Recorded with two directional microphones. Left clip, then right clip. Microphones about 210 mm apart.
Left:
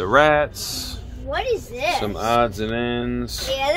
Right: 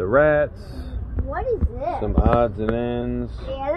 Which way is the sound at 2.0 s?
35° left (ahead or behind).